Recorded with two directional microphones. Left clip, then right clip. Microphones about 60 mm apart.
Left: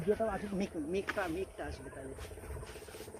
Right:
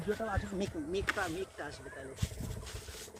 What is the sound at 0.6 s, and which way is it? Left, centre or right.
Speech, centre.